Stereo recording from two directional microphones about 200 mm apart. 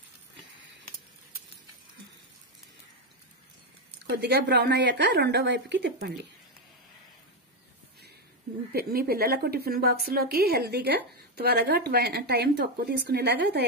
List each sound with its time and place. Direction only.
4.2 s a woman's voice: 55° right (ahead or behind)
8.7 s a woman's voice: 50° right (ahead or behind)